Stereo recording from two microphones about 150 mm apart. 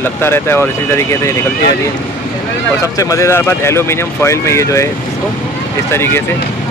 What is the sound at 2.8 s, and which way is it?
Speech, 20° left (ahead or behind).